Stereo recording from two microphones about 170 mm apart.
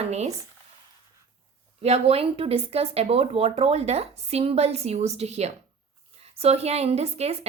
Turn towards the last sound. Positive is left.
turn(degrees=-40)  # may be behind; listen again after turning